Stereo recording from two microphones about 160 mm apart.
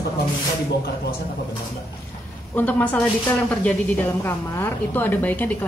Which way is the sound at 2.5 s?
10° left (ahead or behind).